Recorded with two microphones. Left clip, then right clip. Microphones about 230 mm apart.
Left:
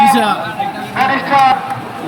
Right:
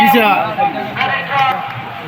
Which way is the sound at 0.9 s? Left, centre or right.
Left.